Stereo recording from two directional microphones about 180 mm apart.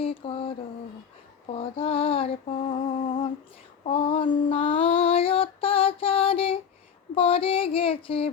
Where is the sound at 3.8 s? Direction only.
30° left (ahead or behind).